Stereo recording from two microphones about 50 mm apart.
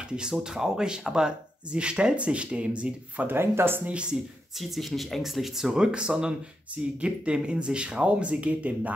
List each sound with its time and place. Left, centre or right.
0.0 s speech: centre
3.3 s speech: right
3.8 s speech: right
4.6 s speech: centre; by 8.9 s right